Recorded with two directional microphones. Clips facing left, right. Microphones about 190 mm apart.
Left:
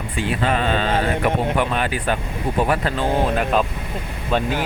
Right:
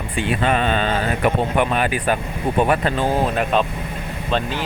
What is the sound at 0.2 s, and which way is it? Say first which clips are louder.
Speech: right 2 dB; 60° right (ahead or behind).